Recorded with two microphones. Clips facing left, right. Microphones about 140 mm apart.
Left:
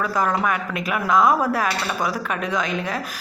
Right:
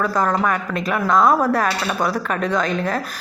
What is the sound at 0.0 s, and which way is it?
A woman's voice, 5° left (ahead or behind).